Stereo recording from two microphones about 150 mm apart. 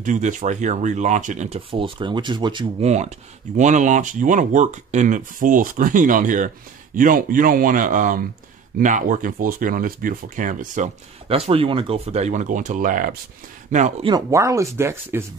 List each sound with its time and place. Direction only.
0.0 s speech: 55° right (ahead or behind)
1.7 s speech: 35° right (ahead or behind)
2.8 s speech: 50° right (ahead or behind)
11.2 s speech: 40° right (ahead or behind); by 13.1 s 65° right (ahead or behind)
13.7 s speech: 50° right (ahead or behind)
14.0 s speech: 25° right (ahead or behind)